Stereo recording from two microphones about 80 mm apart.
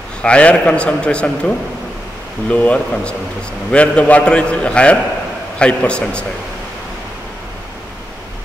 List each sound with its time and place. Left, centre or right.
0.2 s a man's voice: centre
2.5 s a man's voice: centre